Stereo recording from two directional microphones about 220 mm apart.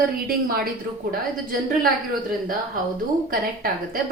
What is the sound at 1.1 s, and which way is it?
A woman's voice, 40° right (ahead or behind).